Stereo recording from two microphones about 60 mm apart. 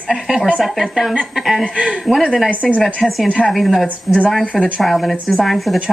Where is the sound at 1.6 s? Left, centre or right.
Centre.